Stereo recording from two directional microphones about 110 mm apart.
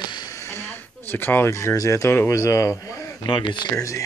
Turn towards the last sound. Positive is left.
turn(degrees=30)  # may be behind; listen again after turning